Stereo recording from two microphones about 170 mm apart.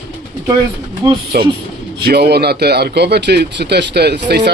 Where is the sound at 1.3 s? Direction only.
65° right (ahead or behind).